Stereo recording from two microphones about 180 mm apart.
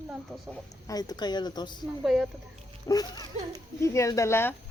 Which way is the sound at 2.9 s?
20° left (ahead or behind).